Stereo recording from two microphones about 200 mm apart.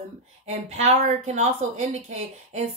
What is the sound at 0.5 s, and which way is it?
Speech, 35° right (ahead or behind).